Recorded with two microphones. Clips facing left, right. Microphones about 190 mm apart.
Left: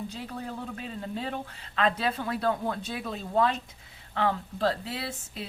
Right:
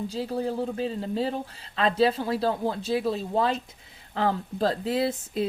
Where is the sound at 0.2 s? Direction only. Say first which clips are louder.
Right 9 dB; 35° right (ahead or behind).